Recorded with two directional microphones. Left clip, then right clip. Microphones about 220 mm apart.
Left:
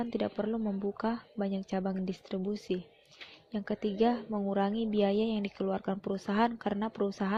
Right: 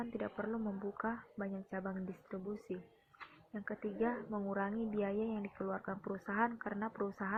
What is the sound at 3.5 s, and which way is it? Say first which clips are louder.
Speech: left 8 dB; 45° left (ahead or behind).